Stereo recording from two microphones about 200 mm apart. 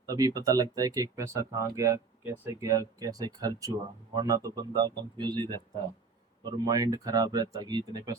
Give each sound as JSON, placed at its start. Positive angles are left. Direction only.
{"t": 0.1, "sound": "speech", "side_deg": -20}